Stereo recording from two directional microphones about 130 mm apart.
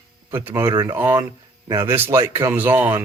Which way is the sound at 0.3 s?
20° right (ahead or behind).